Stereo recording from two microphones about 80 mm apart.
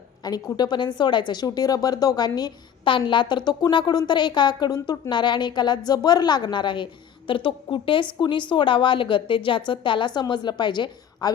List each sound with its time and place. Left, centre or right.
0.2 s a woman's voice: left
7.3 s a woman's voice: left
10.2 s a woman's voice: left